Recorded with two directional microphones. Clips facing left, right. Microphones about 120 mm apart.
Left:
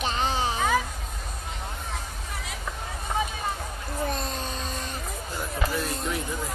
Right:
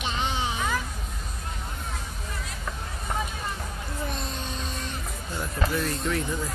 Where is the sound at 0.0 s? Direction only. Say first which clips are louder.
Left 3 dB; 40° left (ahead or behind).